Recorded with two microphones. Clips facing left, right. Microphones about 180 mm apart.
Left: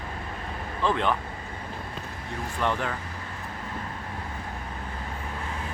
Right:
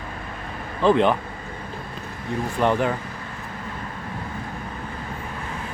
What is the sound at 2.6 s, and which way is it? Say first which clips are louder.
Speech: right 7 dB; 15° right (ahead or behind).